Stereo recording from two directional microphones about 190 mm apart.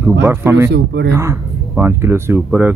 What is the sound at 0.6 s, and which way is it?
Speech, 65° right (ahead or behind).